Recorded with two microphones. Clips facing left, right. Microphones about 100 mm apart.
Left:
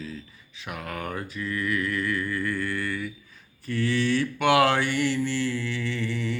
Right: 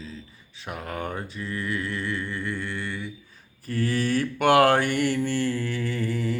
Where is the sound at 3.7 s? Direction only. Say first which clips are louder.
Even; 40° right (ahead or behind).